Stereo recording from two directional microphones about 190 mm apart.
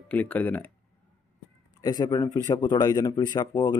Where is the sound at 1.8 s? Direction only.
20° left (ahead or behind).